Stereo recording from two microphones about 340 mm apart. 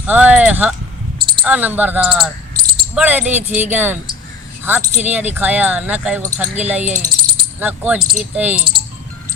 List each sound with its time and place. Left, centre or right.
0.1 s speech: centre
6.8 s speech: right
7.6 s speech: centre